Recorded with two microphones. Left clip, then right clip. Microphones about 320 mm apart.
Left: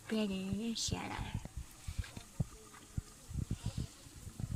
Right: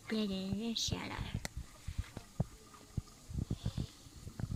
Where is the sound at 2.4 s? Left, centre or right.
Right.